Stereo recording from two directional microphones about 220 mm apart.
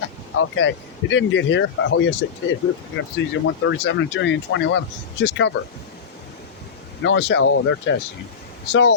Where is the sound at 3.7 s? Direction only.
55° left (ahead or behind).